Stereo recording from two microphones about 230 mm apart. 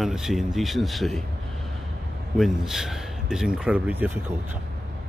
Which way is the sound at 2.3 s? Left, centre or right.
Centre.